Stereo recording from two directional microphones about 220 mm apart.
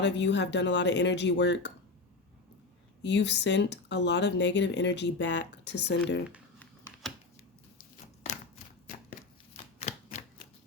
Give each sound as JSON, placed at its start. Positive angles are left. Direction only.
{"t": 0.0, "sound": "speech", "side_deg": 50}
{"t": 3.0, "sound": "speech", "side_deg": 55}
{"t": 9.7, "sound": "typewriter", "side_deg": 30}